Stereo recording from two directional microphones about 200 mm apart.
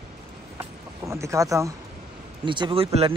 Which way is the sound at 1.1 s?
15° right (ahead or behind).